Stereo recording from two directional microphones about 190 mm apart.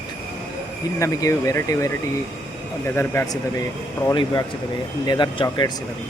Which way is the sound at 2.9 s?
10° left (ahead or behind).